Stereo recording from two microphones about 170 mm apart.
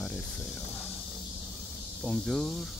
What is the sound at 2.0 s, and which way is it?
Speech, centre (ahead or behind).